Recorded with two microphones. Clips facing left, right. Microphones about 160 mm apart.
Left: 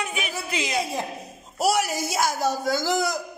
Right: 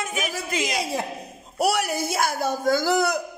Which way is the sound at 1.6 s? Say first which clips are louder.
Even; 60° right (ahead or behind).